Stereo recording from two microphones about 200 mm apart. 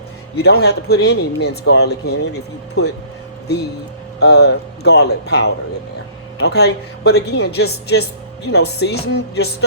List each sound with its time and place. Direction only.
0.3 s speech: 55° left (ahead or behind)
4.2 s speech: 55° left (ahead or behind)